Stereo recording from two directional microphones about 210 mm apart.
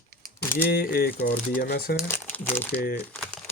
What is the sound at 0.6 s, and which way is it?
Speech, 45° left (ahead or behind).